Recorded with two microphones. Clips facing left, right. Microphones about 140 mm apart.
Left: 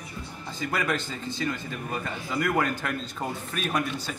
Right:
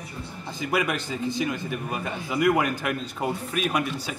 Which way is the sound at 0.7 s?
10° right (ahead or behind).